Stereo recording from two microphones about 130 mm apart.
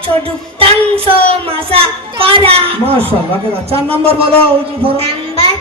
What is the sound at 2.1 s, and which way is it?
Speech, 40° right (ahead or behind).